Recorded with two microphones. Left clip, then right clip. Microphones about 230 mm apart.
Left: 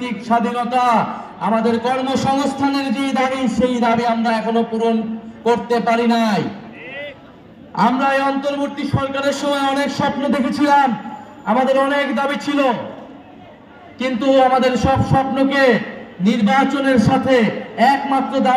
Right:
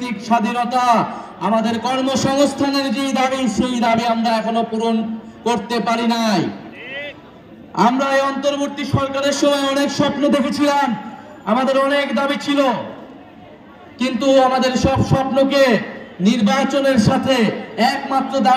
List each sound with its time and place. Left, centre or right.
0.0 s a man's voice: right
7.7 s a man's voice: right
13.9 s a man's voice: right